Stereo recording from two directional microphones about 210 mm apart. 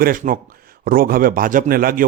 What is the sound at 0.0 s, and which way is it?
Speech, 40° right (ahead or behind).